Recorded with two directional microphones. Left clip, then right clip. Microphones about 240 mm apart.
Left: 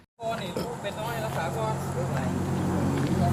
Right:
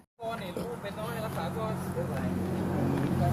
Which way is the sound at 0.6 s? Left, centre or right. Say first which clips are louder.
Left 4 dB; centre.